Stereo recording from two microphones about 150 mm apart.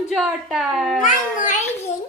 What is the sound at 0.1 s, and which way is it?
Speech, centre (ahead or behind).